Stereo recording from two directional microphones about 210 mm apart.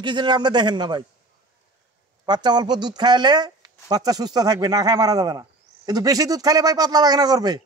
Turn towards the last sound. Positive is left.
turn(degrees=-20)  # may be behind; listen again after turning